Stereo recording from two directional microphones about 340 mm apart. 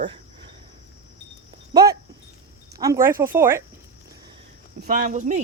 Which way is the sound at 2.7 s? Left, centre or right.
Centre.